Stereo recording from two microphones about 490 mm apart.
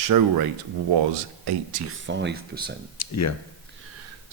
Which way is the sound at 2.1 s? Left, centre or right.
Right.